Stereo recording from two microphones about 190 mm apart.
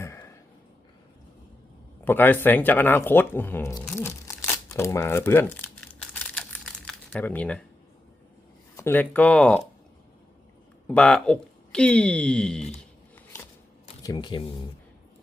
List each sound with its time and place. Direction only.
0.0 s a sound: 15° left (ahead or behind)
2.0 s speech: 10° left (ahead or behind)
3.9 s crumpling: 15° left (ahead or behind)
8.7 s speech: 10° left (ahead or behind)
10.8 s speech: 5° left (ahead or behind)
14.0 s speech: 20° left (ahead or behind)